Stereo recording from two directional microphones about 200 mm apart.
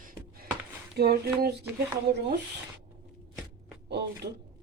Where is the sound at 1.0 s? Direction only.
55° right (ahead or behind).